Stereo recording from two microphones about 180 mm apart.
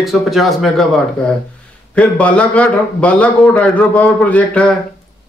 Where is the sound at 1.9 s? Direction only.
5° left (ahead or behind).